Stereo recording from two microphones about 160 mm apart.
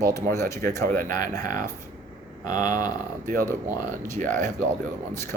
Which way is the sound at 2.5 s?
55° right (ahead or behind).